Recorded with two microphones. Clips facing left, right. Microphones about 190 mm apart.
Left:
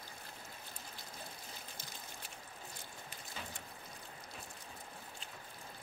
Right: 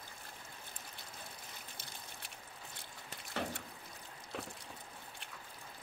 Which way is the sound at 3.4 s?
70° right (ahead or behind).